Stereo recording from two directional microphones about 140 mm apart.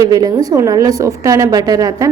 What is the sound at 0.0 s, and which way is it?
A woman's voice, 25° right (ahead or behind).